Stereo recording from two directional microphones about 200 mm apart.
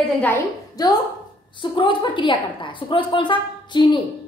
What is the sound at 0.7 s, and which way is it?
A woman's voice, 20° left (ahead or behind).